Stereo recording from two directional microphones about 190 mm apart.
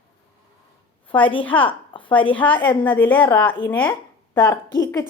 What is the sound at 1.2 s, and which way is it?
A woman's voice, 25° left (ahead or behind).